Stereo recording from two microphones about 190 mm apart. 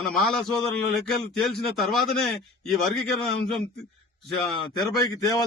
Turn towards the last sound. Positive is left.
turn(degrees=20)  # may be behind; listen again after turning